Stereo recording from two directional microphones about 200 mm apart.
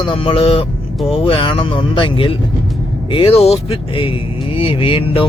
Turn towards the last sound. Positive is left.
turn(degrees=25)  # may be behind; listen again after turning